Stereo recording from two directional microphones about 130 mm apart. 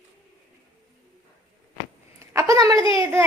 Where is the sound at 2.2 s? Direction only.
25° right (ahead or behind).